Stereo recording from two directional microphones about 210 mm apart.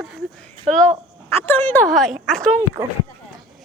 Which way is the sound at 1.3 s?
10° left (ahead or behind).